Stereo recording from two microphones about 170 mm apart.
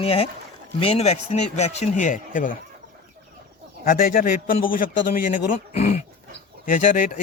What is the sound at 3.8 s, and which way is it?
A man's voice, 60° left (ahead or behind).